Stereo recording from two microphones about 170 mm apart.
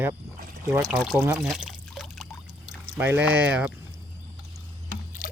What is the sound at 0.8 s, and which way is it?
Speech, centre (ahead or behind).